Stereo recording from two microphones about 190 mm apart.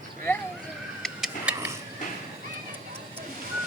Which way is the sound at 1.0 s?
Centre (ahead or behind).